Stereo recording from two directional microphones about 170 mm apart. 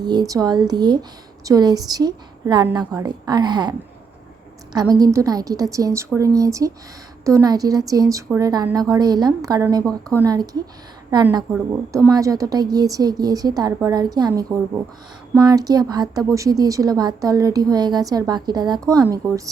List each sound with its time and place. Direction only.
0.0 s a woman's voice: 20° right (ahead or behind)